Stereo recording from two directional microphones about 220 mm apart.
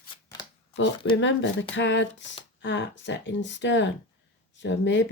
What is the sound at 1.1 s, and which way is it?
Speech, 55° left (ahead or behind).